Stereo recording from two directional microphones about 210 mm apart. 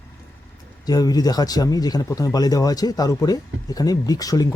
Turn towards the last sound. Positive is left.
turn(degrees=15)  # may be behind; listen again after turning